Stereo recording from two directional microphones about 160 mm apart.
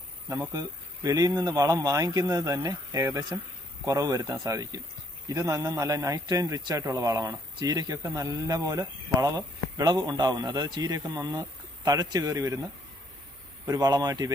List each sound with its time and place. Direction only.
0.3 s a man's voice: 15° right (ahead or behind)
13.7 s a man's voice: 25° right (ahead or behind)